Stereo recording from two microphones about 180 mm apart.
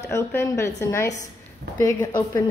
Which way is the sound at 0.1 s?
15° left (ahead or behind).